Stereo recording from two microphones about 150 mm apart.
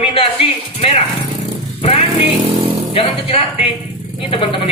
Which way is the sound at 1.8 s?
45° left (ahead or behind).